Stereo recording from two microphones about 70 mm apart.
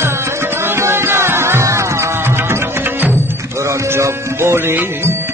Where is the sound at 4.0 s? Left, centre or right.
Right.